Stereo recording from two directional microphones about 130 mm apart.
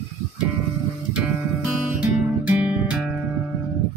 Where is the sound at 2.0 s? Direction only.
10° right (ahead or behind).